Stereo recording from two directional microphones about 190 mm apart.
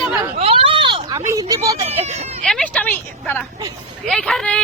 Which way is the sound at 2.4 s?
5° left (ahead or behind).